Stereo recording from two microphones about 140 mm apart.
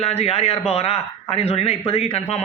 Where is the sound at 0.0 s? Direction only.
45° left (ahead or behind).